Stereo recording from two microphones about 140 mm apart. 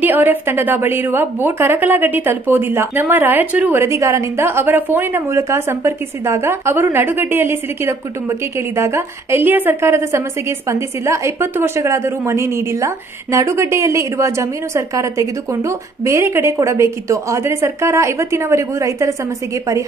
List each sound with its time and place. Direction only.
0.0 s a woman's voice: 15° right (ahead or behind)